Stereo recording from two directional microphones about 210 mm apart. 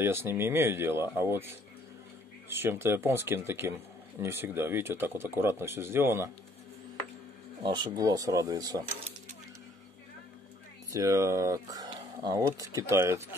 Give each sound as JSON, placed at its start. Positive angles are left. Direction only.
{"t": 0.0, "sound": "speech", "side_deg": -10}
{"t": 7.6, "sound": "speech", "side_deg": -20}
{"t": 10.9, "sound": "speech", "side_deg": -15}